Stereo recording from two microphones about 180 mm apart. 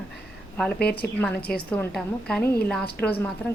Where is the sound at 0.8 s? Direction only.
60° left (ahead or behind).